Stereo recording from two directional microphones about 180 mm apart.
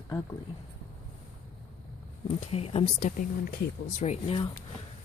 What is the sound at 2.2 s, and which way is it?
Speech, 35° left (ahead or behind).